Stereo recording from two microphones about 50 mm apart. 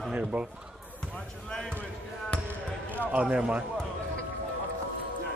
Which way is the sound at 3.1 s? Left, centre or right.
Centre.